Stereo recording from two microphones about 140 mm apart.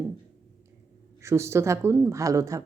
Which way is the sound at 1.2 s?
20° right (ahead or behind).